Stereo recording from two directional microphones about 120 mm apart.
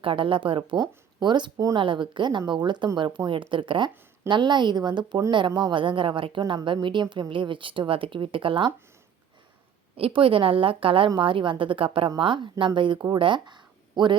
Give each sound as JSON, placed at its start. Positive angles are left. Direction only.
{"t": 0.0, "sound": "a woman's voice", "side_deg": -45}
{"t": 9.9, "sound": "a woman's voice", "side_deg": -50}